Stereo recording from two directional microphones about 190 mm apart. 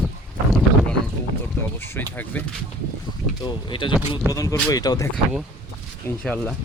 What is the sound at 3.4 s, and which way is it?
Speech, 25° left (ahead or behind).